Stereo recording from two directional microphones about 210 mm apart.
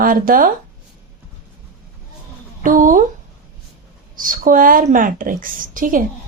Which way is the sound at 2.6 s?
40° right (ahead or behind).